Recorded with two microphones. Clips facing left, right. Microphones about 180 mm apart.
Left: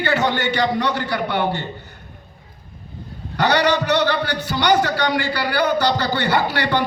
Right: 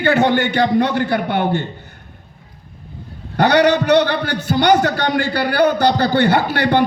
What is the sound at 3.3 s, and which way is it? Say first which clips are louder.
A man's voice: right 5 dB; 55° right (ahead or behind).